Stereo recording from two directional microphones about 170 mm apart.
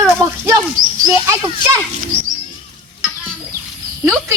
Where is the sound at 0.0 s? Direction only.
20° right (ahead or behind).